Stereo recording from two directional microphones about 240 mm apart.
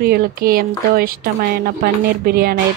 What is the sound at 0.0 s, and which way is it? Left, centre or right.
A woman's voice, right.